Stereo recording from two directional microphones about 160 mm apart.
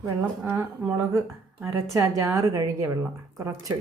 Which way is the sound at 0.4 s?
15° right (ahead or behind).